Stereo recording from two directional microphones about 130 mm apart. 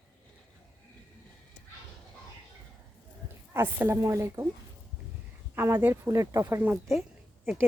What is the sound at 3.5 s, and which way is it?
Speech, 15° right (ahead or behind).